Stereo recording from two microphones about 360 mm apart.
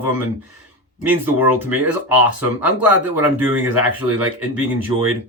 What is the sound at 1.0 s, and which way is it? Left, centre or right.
Speech, centre.